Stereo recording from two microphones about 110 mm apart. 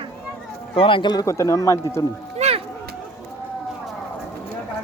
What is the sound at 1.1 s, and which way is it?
Speech, 30° left (ahead or behind).